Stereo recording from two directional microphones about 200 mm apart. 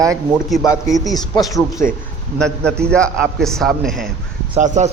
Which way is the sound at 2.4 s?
5° left (ahead or behind).